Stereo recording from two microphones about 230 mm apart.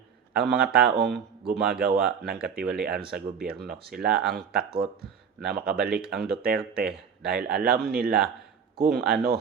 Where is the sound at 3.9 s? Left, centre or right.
Centre.